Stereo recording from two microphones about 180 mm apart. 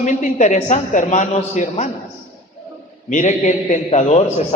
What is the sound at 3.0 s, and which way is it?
A man's voice, 45° left (ahead or behind).